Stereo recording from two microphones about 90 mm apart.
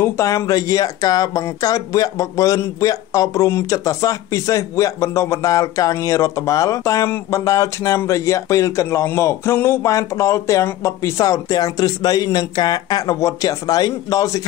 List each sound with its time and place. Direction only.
0.0 s speech: 35° left (ahead or behind)
11.5 s speech: 45° left (ahead or behind)